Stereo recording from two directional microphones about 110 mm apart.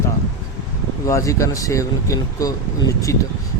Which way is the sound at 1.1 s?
30° left (ahead or behind).